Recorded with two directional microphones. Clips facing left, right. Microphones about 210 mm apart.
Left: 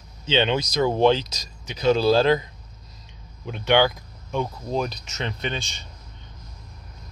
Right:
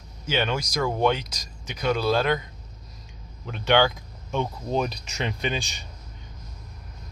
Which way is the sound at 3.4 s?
10° left (ahead or behind).